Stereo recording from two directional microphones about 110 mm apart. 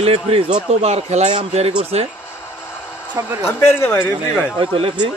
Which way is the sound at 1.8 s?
70° right (ahead or behind).